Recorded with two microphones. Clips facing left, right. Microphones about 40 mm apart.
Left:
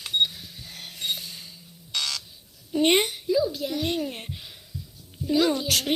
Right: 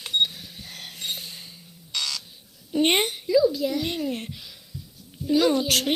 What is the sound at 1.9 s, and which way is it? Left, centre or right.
Buzzer, left.